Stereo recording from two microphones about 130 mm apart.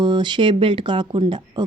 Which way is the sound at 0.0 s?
35° right (ahead or behind).